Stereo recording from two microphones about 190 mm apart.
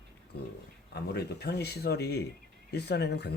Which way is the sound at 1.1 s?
60° left (ahead or behind).